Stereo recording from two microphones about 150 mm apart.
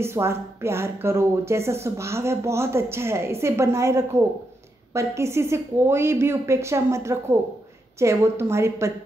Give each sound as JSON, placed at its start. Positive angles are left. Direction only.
{"t": 0.0, "sound": "a woman's voice", "side_deg": -15}